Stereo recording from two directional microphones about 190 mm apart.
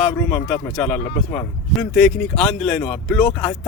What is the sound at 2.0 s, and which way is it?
Speech, centre (ahead or behind).